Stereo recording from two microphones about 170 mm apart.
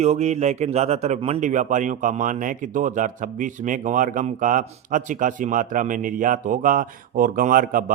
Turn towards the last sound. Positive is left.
turn(degrees=-55)  # may be behind; listen again after turning